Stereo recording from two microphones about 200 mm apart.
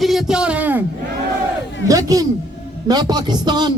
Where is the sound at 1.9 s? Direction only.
15° right (ahead or behind).